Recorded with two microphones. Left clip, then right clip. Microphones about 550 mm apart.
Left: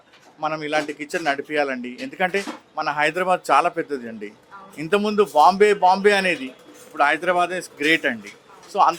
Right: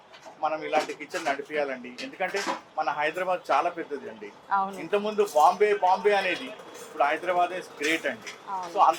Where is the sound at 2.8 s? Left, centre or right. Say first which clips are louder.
Left 7 dB; left.